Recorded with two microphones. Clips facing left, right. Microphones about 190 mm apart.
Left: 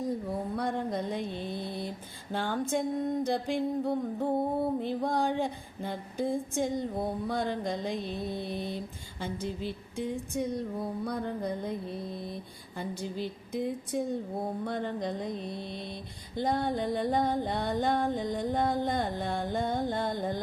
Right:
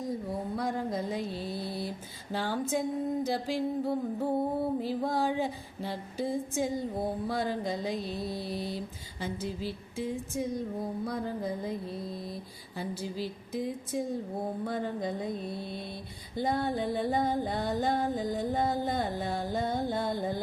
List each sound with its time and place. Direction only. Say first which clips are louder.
0.0 s mantra: left 2 dB; centre (ahead or behind)
8.5 s mantra: even; 35° right (ahead or behind)
9.2 s mantra: even; 5° right (ahead or behind)